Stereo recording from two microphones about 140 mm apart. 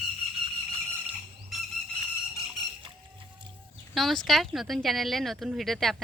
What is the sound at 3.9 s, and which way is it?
Speech, centre (ahead or behind).